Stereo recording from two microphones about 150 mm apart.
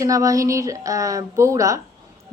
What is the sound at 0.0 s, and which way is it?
A woman's voice, 20° right (ahead or behind).